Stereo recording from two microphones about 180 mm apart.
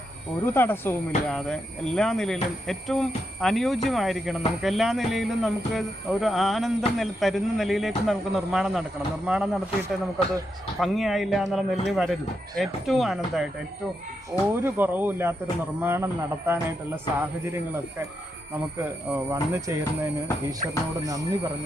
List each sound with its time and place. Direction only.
0.4 s speech: 10° left (ahead or behind); by 9.6 s 5° right (ahead or behind)
10.8 s speech: centre (ahead or behind)
14.6 s speech: 10° right (ahead or behind)
18.8 s speech: 5° right (ahead or behind)
19.3 s speech: 15° right (ahead or behind)